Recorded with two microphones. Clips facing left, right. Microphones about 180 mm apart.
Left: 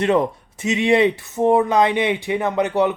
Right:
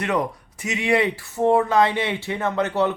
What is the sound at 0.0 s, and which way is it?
Speech, 25° left (ahead or behind).